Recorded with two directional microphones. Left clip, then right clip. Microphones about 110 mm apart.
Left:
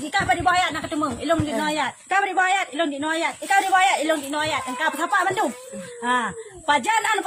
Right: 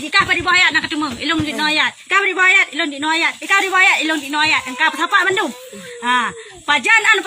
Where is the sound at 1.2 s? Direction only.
40° left (ahead or behind).